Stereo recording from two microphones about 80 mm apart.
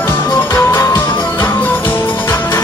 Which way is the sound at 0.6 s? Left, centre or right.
Left.